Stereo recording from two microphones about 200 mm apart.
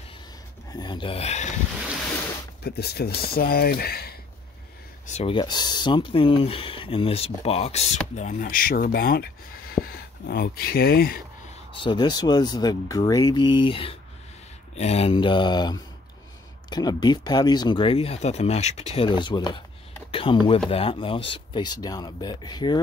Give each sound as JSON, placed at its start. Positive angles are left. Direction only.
{"t": 0.7, "sound": "speech", "side_deg": 20}
{"t": 2.6, "sound": "speech", "side_deg": 50}
{"t": 5.0, "sound": "speech", "side_deg": 30}
{"t": 11.8, "sound": "speech", "side_deg": 20}